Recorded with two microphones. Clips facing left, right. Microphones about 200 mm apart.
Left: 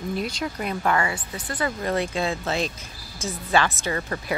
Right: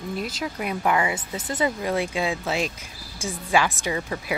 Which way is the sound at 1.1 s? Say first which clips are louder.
Right 3 dB; 25° right (ahead or behind).